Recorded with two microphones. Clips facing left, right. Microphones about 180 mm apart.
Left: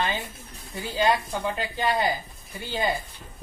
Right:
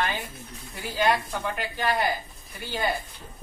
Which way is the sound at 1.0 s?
25° left (ahead or behind).